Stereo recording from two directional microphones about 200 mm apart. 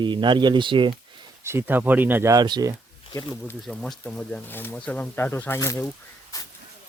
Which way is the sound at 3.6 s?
Centre (ahead or behind).